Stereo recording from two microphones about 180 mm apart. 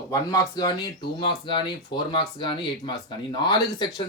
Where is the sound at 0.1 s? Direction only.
20° left (ahead or behind).